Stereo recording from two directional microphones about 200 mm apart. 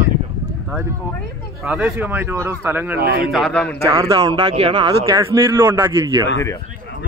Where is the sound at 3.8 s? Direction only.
15° right (ahead or behind).